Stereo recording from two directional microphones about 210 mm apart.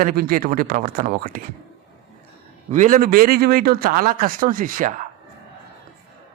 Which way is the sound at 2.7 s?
40° right (ahead or behind).